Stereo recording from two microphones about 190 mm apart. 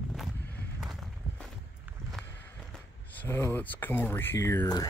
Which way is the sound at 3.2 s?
15° left (ahead or behind).